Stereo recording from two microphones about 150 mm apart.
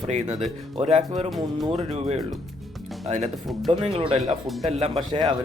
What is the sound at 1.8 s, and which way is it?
Speech, 45° right (ahead or behind).